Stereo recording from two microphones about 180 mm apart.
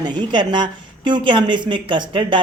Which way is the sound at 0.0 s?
25° right (ahead or behind).